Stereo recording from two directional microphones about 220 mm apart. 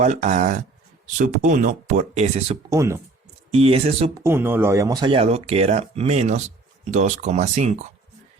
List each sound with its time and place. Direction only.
0.0 s speech: 30° right (ahead or behind)
2.6 s speech: 15° right (ahead or behind)
3.5 s speech: 25° right (ahead or behind)
4.2 s speech: 10° right (ahead or behind); by 7.8 s 30° right (ahead or behind)